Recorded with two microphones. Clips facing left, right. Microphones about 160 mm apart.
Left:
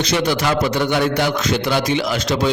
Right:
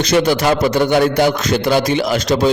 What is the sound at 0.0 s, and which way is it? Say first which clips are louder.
A man's voice: right 5 dB; 45° right (ahead or behind).